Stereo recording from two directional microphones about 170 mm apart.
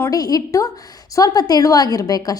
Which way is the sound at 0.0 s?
20° left (ahead or behind).